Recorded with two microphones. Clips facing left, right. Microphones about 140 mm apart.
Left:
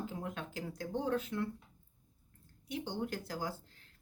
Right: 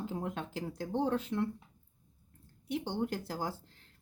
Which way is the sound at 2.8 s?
30° right (ahead or behind).